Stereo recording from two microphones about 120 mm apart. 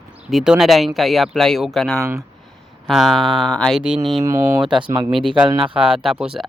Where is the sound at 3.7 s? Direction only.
10° right (ahead or behind).